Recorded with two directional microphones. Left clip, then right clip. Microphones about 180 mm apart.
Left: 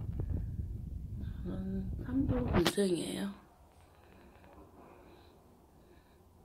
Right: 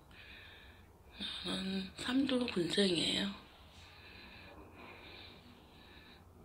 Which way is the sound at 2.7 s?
30° left (ahead or behind).